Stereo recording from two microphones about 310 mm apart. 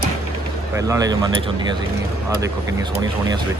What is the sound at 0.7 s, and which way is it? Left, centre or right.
Speech, centre.